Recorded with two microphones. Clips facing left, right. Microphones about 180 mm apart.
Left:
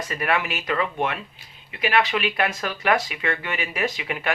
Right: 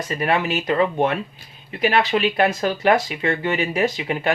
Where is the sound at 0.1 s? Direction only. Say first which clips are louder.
Right 5 dB; 30° right (ahead or behind).